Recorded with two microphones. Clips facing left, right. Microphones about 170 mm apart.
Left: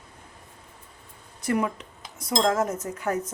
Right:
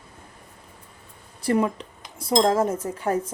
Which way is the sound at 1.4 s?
30° right (ahead or behind).